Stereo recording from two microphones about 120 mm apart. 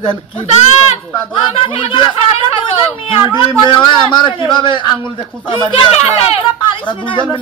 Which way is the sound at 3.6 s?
40° left (ahead or behind).